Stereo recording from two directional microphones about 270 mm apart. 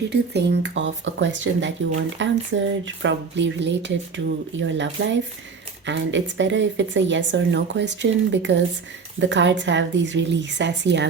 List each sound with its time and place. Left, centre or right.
0.1 s a woman's voice: right